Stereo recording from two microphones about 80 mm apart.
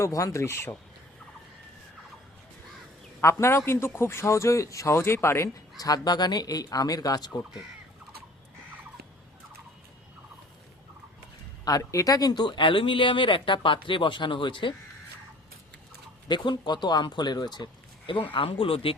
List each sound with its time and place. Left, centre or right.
0.0 s speech: left
3.2 s speech: left
5.8 s speech: left
11.8 s speech: left
16.3 s speech: left